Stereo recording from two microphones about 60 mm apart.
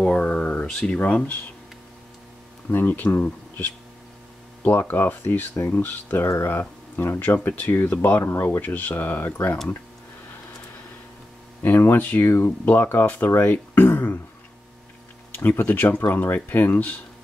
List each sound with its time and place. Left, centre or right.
0.0 s a sound: left
0.9 s speech: left
2.7 s speech: left
6.0 s speech: left
11.6 s speech: left
15.3 s speech: left